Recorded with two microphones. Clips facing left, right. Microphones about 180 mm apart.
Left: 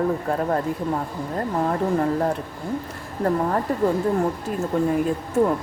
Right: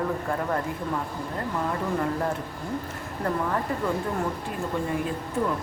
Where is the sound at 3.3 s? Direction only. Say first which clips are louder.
Left 5 dB; 40° left (ahead or behind).